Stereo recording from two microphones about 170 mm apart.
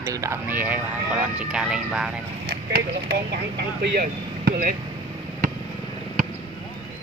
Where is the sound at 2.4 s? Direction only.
75° right (ahead or behind); by 4.8 s 55° right (ahead or behind).